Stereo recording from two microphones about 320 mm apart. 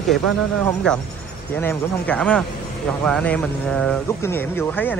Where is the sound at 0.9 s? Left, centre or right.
Centre.